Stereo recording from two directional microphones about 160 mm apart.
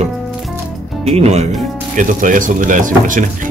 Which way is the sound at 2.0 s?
55° right (ahead or behind).